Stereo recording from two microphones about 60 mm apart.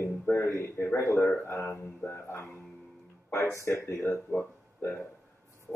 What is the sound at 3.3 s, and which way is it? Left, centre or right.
Speech, left.